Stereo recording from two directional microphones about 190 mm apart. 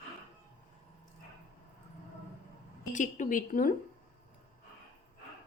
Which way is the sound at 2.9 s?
45° left (ahead or behind).